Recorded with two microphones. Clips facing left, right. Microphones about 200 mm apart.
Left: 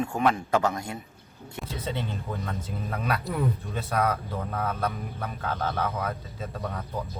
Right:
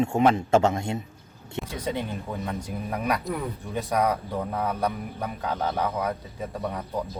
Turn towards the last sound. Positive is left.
turn(degrees=-15)  # may be behind; listen again after turning